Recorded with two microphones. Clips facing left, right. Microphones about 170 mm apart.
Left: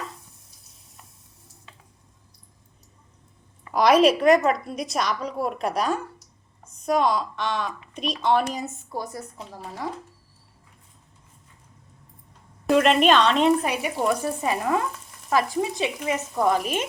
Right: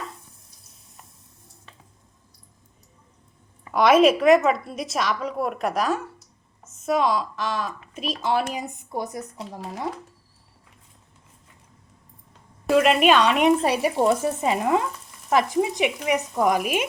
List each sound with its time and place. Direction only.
3.7 s a woman's voice: centre (ahead or behind)
8.5 s sizzle: 15° right (ahead or behind)
12.6 s sizzle: 5° right (ahead or behind)
13.6 s speech: 30° right (ahead or behind)
15.3 s sizzle: 20° right (ahead or behind)